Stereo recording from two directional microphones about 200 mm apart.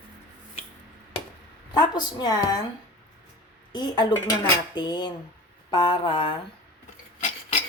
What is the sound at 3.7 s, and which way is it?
Speech, 20° left (ahead or behind).